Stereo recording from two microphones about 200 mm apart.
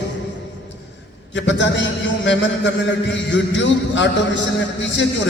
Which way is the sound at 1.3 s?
65° left (ahead or behind).